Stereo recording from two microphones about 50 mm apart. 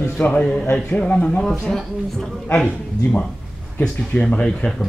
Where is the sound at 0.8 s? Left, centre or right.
Left.